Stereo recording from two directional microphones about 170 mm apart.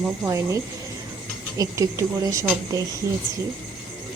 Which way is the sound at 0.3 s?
15° right (ahead or behind).